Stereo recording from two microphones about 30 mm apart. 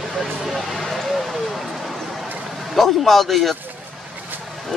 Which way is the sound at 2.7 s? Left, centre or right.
Centre.